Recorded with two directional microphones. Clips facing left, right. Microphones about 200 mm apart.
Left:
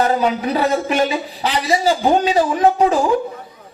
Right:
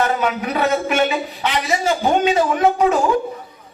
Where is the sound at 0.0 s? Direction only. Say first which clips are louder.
Left 3 dB; 35° left (ahead or behind).